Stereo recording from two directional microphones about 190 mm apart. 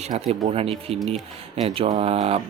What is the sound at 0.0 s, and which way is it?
Speech, 40° right (ahead or behind).